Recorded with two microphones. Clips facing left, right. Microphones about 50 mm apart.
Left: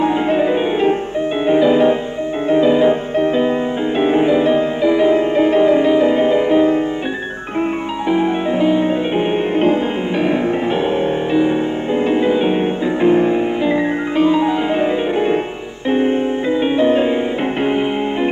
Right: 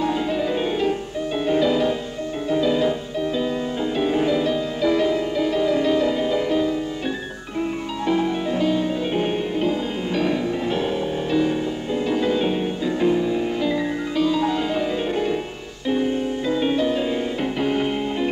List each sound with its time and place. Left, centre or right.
0.0 s music: left
8.1 s music: left